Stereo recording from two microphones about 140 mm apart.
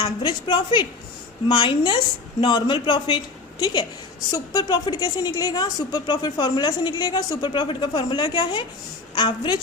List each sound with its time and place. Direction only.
0.0 s a woman's voice: 30° left (ahead or behind)